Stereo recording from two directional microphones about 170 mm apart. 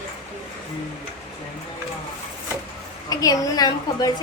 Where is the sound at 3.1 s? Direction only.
20° left (ahead or behind).